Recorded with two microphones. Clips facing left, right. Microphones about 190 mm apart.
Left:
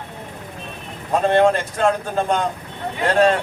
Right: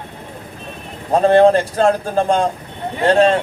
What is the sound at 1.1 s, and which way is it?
A man's voice, 35° right (ahead or behind).